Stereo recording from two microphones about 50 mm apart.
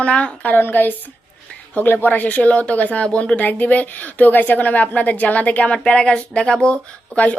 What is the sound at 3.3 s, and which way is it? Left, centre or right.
A woman's voice, left.